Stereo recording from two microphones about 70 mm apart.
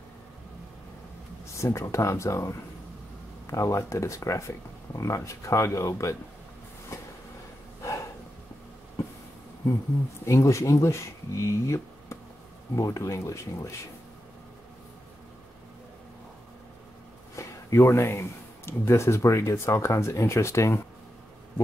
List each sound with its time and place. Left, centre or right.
1.6 s speech: left
10.2 s speech: left
17.4 s a sound: left
18.7 s speech: left